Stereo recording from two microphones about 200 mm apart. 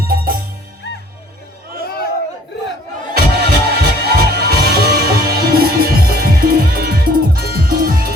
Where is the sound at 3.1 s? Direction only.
50° right (ahead or behind).